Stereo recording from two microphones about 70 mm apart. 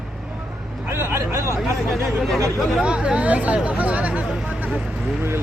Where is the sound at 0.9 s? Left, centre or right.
Right.